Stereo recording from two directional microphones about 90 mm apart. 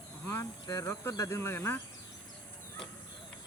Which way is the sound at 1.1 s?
35° left (ahead or behind).